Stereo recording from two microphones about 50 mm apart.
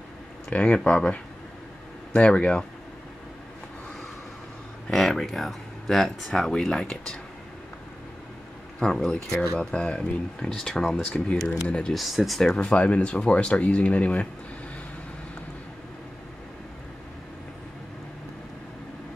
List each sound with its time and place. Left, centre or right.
0.5 s speech: left
4.8 s speech: centre
6.5 s speech: centre
8.7 s speech: centre
11.1 s speech: left
11.9 s speech: centre
12.4 s speech: centre